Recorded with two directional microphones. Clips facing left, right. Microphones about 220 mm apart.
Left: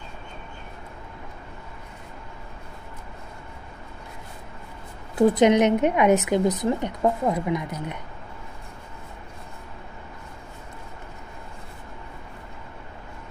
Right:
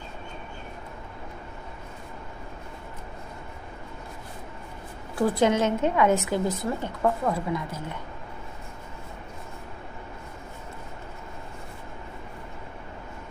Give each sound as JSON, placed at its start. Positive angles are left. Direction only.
{"t": 5.1, "sound": "a woman's voice", "side_deg": 20}